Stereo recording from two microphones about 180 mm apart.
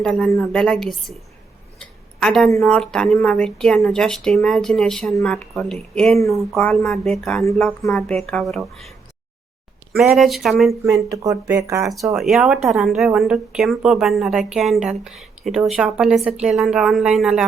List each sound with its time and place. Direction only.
0.0 s a woman's voice: 5° left (ahead or behind)
1.8 s a sound: 5° left (ahead or behind)
2.6 s a woman's voice: 5° left (ahead or behind)
10.8 s speech: 20° right (ahead or behind)
12.1 s a woman's voice: centre (ahead or behind)